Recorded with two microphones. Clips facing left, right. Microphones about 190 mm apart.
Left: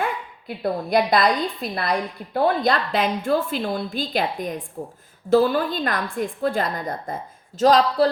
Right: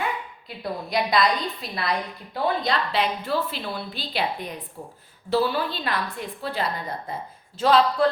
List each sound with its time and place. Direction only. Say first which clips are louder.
0.4 s a woman's voice: left 8 dB; 55° left (ahead or behind); by 8.1 s 40° left (ahead or behind)